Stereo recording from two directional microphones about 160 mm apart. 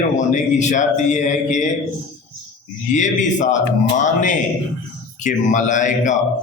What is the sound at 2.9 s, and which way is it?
A man's voice, 50° left (ahead or behind).